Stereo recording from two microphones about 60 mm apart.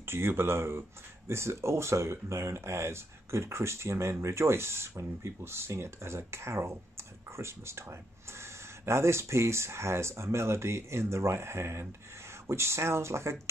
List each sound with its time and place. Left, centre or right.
0.0 s speech: right